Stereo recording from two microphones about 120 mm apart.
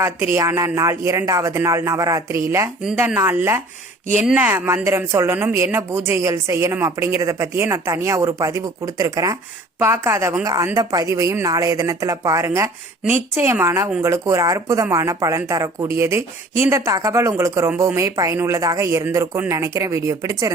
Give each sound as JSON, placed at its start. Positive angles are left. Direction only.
{"t": 0.0, "sound": "speech", "side_deg": -20}